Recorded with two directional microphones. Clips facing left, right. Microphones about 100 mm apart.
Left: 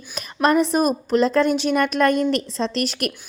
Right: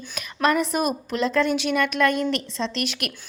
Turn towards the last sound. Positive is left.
turn(degrees=35)  # may be behind; listen again after turning